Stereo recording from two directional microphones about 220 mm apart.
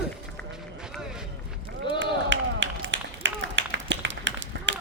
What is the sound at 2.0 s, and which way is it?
Run, 55° right (ahead or behind).